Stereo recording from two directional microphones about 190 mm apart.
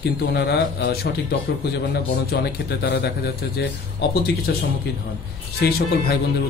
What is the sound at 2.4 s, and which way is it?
A man's voice, 55° left (ahead or behind).